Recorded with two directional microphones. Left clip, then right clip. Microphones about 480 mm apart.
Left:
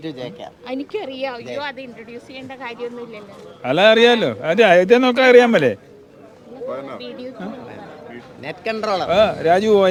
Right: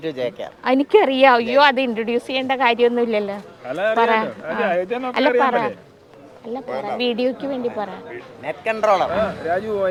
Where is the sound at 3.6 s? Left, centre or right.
Left.